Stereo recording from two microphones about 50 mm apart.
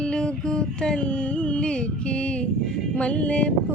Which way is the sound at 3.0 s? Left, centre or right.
Left.